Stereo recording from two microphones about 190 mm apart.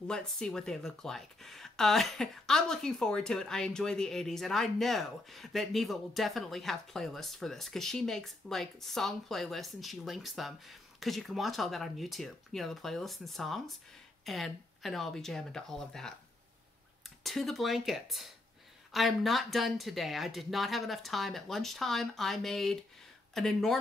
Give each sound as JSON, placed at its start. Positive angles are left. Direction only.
{"t": 0.1, "sound": "speech", "side_deg": 5}
{"t": 17.2, "sound": "speech", "side_deg": 0}